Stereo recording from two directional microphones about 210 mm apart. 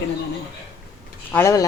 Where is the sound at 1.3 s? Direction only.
15° left (ahead or behind).